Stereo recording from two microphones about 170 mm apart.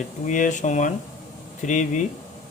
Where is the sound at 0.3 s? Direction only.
45° left (ahead or behind).